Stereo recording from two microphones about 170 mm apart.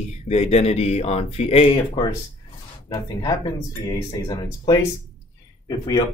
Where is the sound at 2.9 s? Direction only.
25° left (ahead or behind).